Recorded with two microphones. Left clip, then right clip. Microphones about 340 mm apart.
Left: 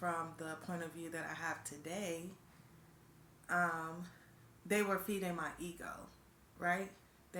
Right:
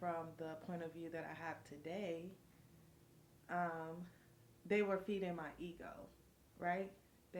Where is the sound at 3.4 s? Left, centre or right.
Right.